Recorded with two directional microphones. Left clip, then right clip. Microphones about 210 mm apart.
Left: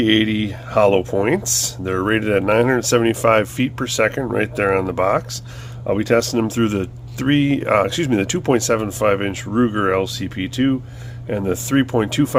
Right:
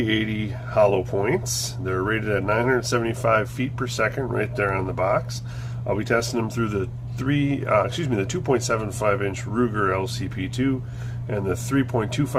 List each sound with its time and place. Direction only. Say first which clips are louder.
0.0 s speech: left 8 dB; 50° left (ahead or behind)